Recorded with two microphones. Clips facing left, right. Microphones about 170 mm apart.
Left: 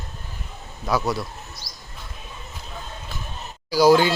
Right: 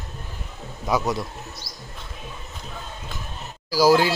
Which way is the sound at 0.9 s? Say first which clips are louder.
Even; 20° right (ahead or behind).